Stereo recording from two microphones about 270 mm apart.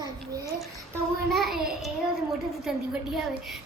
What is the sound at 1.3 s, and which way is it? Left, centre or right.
Speech, centre.